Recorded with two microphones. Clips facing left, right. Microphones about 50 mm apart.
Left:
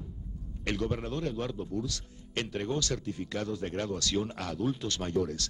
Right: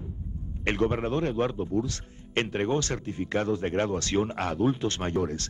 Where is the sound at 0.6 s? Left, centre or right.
Right.